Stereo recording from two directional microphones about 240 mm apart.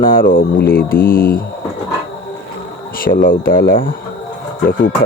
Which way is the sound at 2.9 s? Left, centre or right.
Left.